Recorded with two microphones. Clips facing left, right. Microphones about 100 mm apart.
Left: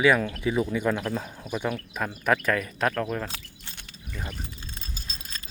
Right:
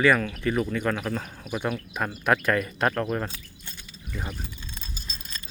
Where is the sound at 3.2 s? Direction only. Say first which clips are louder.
Right 1 dB; 90° left.